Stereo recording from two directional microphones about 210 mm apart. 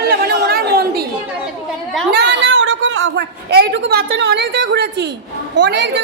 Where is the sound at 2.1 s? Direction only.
55° right (ahead or behind).